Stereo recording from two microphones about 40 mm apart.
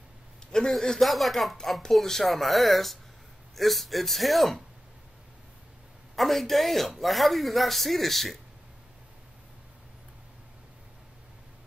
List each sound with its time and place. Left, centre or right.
0.5 s a sound: centre
1.0 s speech: centre
6.1 s speech: centre